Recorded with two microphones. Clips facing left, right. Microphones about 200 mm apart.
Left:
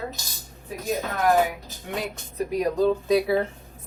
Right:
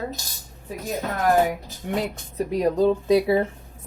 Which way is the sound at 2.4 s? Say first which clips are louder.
Right 2 dB; 25° right (ahead or behind).